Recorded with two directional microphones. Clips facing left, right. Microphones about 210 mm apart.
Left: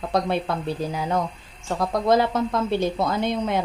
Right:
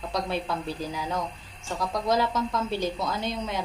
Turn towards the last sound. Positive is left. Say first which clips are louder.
# left 7 dB
turn(degrees=55)  # may be behind; listen again after turning